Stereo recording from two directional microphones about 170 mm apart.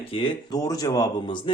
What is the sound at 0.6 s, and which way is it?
Speech, 20° left (ahead or behind).